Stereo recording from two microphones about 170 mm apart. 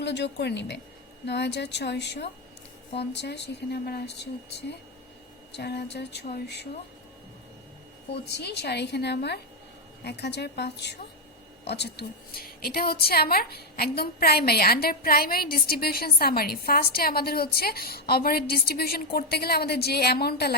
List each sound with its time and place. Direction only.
0.0 s a woman's voice: 85° left
5.5 s speech: 75° left (ahead or behind)
8.1 s a woman's voice: 75° left (ahead or behind)